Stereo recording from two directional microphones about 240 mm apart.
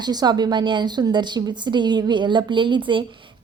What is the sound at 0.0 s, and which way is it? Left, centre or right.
A woman's voice, centre.